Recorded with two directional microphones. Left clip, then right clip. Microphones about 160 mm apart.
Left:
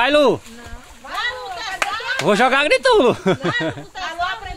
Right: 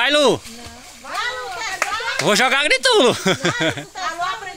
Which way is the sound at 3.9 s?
15° right (ahead or behind).